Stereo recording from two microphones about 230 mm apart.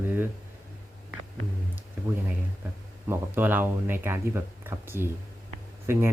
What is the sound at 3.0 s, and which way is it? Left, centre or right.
Speech, centre.